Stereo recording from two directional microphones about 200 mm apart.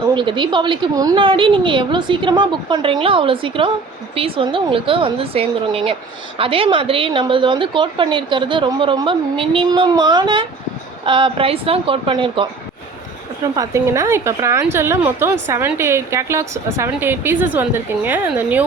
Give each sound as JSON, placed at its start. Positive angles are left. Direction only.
{"t": 0.1, "sound": "a woman's voice", "side_deg": -25}
{"t": 13.6, "sound": "a woman's voice", "side_deg": -15}